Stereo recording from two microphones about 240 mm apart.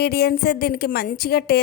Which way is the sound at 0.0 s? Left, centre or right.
Left.